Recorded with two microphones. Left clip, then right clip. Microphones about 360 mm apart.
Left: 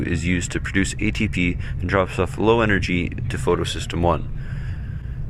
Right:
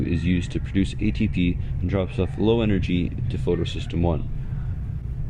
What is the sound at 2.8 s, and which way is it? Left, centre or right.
Speech, left.